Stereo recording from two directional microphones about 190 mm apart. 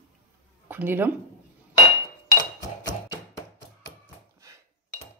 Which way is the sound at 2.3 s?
20° left (ahead or behind).